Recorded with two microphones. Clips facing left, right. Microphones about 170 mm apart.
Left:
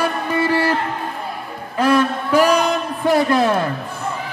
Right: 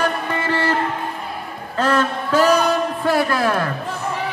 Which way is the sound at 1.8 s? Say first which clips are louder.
Left 3 dB; 10° left (ahead or behind).